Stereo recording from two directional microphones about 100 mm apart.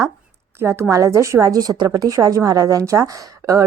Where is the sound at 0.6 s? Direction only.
30° right (ahead or behind).